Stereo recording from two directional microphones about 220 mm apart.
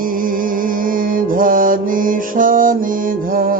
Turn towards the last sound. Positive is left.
turn(degrees=-40)  # may be behind; listen again after turning